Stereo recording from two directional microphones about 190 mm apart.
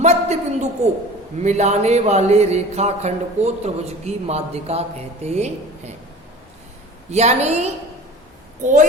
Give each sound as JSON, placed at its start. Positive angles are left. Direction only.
{"t": 0.0, "sound": "a sound", "side_deg": -35}
{"t": 1.4, "sound": "speech", "side_deg": -35}
{"t": 7.1, "sound": "speech", "side_deg": -35}